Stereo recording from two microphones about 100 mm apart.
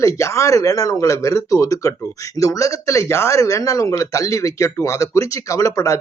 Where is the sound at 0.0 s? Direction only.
30° left (ahead or behind).